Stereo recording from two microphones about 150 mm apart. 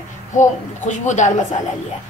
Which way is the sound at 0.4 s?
55° left (ahead or behind).